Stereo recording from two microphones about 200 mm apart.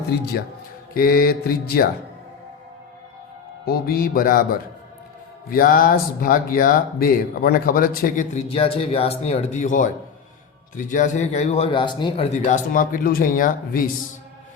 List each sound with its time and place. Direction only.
0.9 s speech: 45° left (ahead or behind)
3.7 s speech: 50° left (ahead or behind)
5.5 s speech: 45° left (ahead or behind)